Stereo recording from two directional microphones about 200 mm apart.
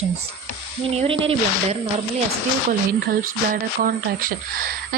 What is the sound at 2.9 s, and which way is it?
Speech, 45° right (ahead or behind).